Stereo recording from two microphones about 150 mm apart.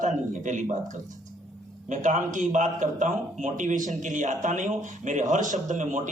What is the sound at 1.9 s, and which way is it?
A man's voice, 55° right (ahead or behind).